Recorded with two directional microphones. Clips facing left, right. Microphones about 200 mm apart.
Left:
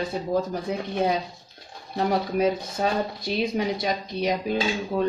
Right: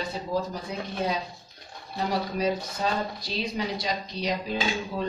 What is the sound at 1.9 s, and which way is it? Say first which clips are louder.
Speech: left 5 dB; 55° left (ahead or behind).